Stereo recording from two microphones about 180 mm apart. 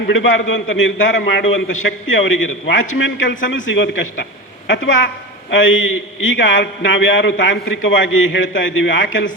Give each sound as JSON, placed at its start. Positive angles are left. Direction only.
{"t": 0.1, "sound": "a man's voice", "side_deg": 90}